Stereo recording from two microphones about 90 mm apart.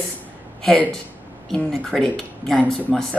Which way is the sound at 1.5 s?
5° left (ahead or behind).